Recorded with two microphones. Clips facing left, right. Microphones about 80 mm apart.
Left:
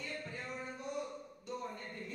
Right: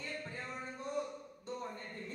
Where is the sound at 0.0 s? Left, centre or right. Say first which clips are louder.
Even; right.